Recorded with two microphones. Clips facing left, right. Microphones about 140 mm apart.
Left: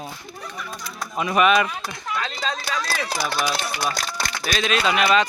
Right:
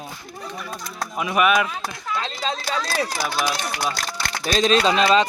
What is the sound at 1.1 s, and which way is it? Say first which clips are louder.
Speech: left 1 dB; 5° right (ahead or behind).